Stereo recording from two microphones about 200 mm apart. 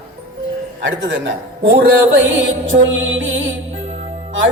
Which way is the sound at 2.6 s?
75° right (ahead or behind).